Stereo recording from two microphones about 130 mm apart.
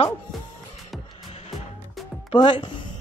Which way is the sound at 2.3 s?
40° left (ahead or behind).